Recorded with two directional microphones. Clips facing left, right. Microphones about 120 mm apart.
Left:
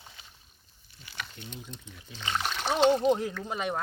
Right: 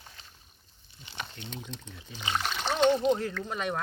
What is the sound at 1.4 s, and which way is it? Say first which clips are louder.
Speech: right 2 dB; 85° right.